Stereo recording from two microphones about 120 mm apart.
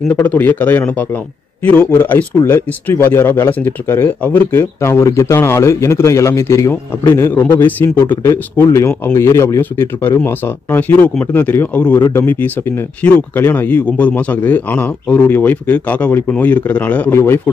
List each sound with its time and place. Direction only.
0.1 s a man's voice: 15° left (ahead or behind)